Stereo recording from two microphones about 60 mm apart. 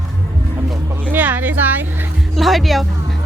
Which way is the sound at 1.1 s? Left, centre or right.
Right.